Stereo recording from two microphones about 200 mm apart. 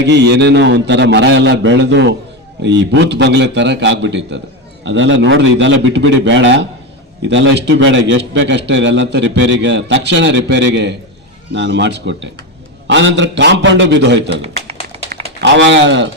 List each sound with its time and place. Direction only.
0.0 s a man's voice: 60° right (ahead or behind)